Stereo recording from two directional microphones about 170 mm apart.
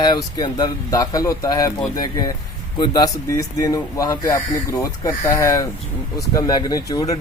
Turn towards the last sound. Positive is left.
turn(degrees=20)  # may be behind; listen again after turning